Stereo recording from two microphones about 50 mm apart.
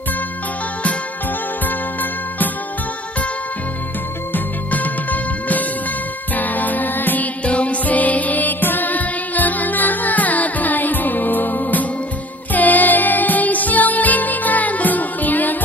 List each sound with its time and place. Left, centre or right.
4.3 s music: left
7.4 s music: left